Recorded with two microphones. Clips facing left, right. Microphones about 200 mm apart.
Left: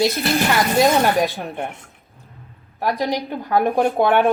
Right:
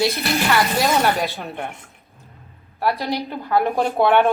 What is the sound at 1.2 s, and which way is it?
Speech, 15° left (ahead or behind).